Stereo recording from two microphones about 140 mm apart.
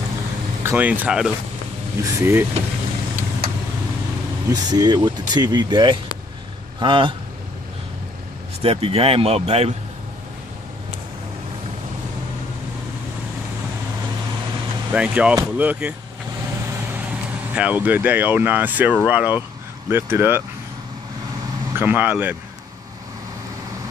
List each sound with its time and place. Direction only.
0.7 s speech: 10° right (ahead or behind)
2.1 s speech: 20° right (ahead or behind)
3.4 s vehicle: 90° right
4.5 s speech: 30° right (ahead or behind)
8.6 s speech: 45° right (ahead or behind)
14.9 s speech: 10° right (ahead or behind)
17.6 s speech: 10° right (ahead or behind)
21.7 s speech: 15° right (ahead or behind)